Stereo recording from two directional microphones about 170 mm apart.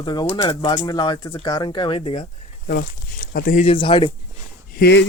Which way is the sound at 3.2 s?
55° left (ahead or behind).